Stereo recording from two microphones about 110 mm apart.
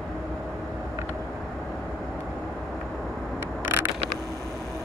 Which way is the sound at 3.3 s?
20° right (ahead or behind).